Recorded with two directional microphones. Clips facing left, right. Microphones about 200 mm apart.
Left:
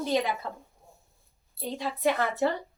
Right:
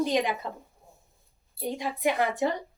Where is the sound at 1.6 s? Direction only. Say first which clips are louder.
Even; 15° right (ahead or behind).